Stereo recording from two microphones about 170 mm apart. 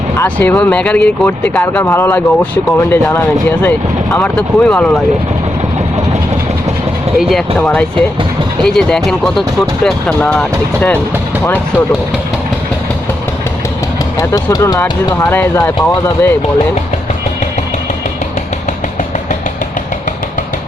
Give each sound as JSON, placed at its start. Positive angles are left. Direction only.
{"t": 0.2, "sound": "speech", "side_deg": 10}
{"t": 7.2, "sound": "speech", "side_deg": 0}
{"t": 14.2, "sound": "speech", "side_deg": 20}